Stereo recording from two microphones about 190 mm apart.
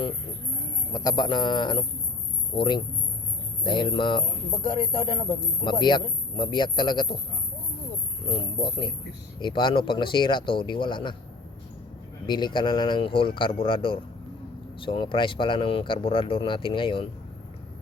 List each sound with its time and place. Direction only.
0.9 s speech: 20° left (ahead or behind)
8.3 s speech: 25° left (ahead or behind)
12.2 s speech: 25° left (ahead or behind)